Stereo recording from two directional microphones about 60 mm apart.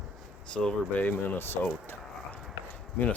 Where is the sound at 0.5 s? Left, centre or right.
Centre.